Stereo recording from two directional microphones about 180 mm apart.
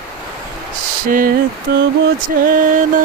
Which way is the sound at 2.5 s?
50° right (ahead or behind).